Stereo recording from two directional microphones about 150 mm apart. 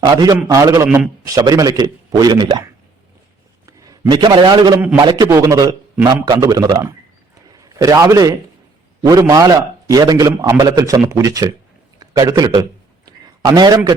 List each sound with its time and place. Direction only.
0.0 s a man's voice: 25° right (ahead or behind)
3.7 s a man's voice: 25° right (ahead or behind)
11.9 s a sound: 25° right (ahead or behind)